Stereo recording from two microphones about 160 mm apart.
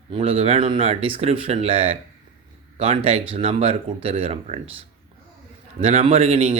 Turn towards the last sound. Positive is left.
turn(degrees=-40)  # may be behind; listen again after turning